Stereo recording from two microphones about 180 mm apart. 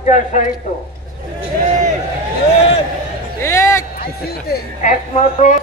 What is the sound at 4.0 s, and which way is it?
Speech, 60° left (ahead or behind).